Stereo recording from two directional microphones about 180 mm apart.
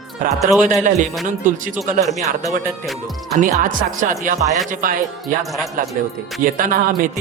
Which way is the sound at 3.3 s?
45° right (ahead or behind).